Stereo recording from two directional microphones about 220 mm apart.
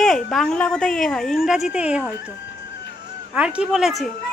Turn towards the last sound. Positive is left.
turn(degrees=0)  # may be behind; listen again after turning